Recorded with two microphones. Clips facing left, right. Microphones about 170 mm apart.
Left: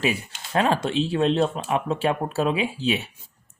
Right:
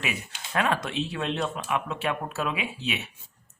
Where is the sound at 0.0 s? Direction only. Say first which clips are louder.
Left 8 dB; 30° left (ahead or behind).